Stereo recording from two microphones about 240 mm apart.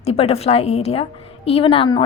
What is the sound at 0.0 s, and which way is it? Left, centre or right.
A woman's voice, left.